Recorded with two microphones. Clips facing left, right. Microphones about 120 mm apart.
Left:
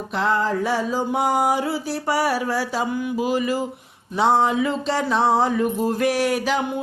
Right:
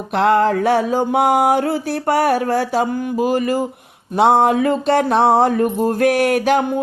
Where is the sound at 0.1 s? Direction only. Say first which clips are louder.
Right 7 dB; 65° right (ahead or behind).